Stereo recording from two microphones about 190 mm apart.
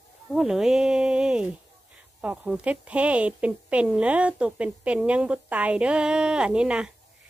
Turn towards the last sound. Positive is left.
turn(degrees=-5)  # may be behind; listen again after turning